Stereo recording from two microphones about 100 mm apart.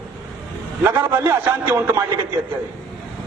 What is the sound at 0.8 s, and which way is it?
A man's voice, 20° right (ahead or behind).